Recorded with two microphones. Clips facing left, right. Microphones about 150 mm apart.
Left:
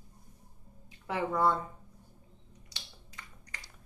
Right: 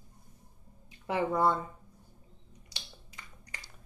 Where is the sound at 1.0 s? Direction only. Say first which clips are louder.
Right 1 dB; 15° right (ahead or behind).